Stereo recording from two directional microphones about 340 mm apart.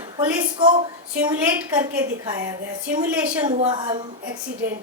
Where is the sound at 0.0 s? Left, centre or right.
Centre.